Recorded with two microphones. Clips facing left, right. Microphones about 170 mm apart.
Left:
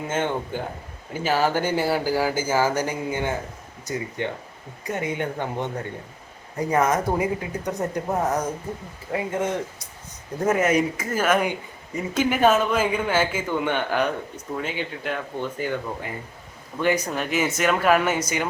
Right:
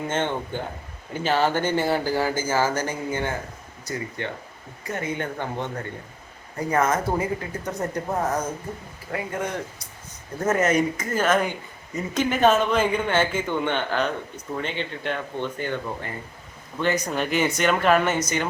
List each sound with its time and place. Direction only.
0.1 s speech: 10° left (ahead or behind)
10.4 s speech: 10° left (ahead or behind)